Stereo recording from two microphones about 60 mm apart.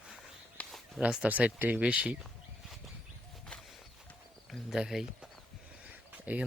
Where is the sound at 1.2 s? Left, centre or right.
Right.